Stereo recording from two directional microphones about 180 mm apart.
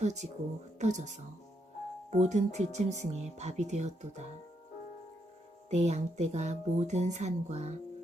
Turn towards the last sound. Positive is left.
turn(degrees=-40)  # may be behind; listen again after turning